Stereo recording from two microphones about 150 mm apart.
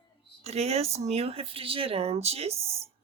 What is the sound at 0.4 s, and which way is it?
Speech, 45° right (ahead or behind).